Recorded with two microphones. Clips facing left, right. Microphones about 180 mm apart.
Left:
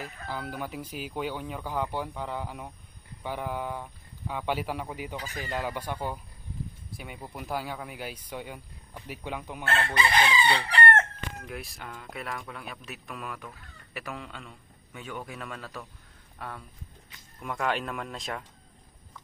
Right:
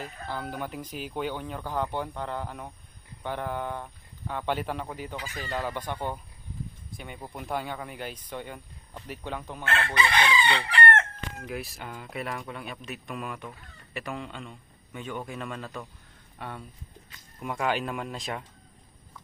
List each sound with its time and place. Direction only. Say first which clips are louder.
0.0 s speech: right 1 dB; 5° left (ahead or behind)
9.6 s chicken: even; 35° left (ahead or behind)
11.4 s speech: right 3 dB; centre (ahead or behind)